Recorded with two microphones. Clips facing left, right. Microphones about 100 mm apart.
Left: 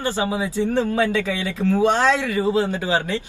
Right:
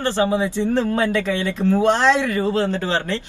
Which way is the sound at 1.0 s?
20° right (ahead or behind).